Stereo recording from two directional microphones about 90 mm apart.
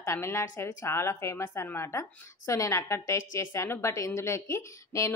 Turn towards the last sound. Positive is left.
turn(degrees=35)  # may be behind; listen again after turning